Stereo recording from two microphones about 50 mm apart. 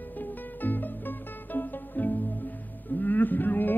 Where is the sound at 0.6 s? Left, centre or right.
Left.